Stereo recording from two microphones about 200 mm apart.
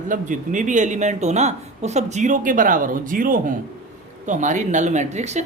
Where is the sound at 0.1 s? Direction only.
40° right (ahead or behind).